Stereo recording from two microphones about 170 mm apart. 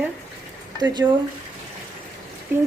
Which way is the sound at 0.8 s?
25° right (ahead or behind).